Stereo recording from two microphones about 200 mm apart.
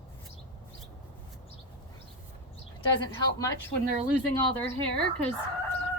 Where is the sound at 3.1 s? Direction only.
15° left (ahead or behind).